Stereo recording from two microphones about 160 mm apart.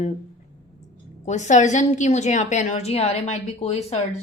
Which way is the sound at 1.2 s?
45° left (ahead or behind).